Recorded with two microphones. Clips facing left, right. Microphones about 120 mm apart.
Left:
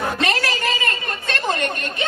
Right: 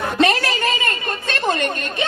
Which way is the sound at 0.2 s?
25° right (ahead or behind).